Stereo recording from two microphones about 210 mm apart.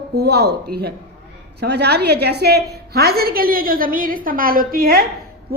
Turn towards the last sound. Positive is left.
turn(degrees=-45)  # may be behind; listen again after turning